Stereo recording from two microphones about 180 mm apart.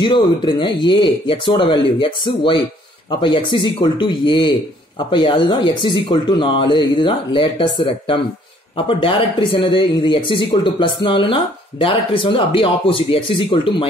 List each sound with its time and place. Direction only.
0.0 s speech: 25° left (ahead or behind)